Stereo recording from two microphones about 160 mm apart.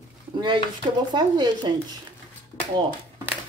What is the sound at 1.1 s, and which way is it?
Speech, 30° right (ahead or behind).